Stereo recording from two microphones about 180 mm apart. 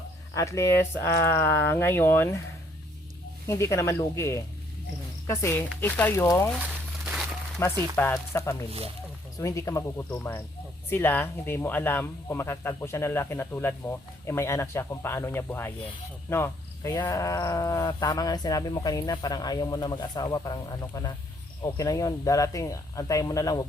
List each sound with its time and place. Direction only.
0.3 s speech: 15° left (ahead or behind)
3.4 s speech: 15° left (ahead or behind)
6.6 s crumpling: 5° right (ahead or behind)
7.6 s speech: 15° left (ahead or behind)